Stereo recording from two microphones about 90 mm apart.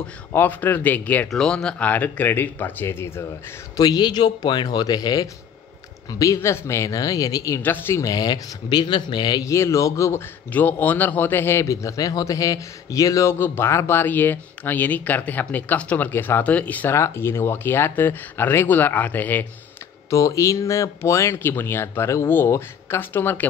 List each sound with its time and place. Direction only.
0.3 s a man's voice: 20° left (ahead or behind)
1.3 s a man's voice: 5° left (ahead or behind); by 3.3 s 25° left (ahead or behind)
3.7 s speech: 45° left (ahead or behind)
7.6 s a man's voice: 25° left (ahead or behind)
8.0 s speech: 45° left (ahead or behind)
9.4 s speech: 35° left (ahead or behind)
10.5 s a man's voice: 20° left (ahead or behind)
16.9 s a man's voice: 30° left (ahead or behind)
20.1 s speech: 35° left (ahead or behind)